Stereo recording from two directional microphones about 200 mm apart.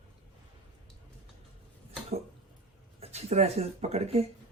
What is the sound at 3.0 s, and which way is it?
Speech, 30° right (ahead or behind).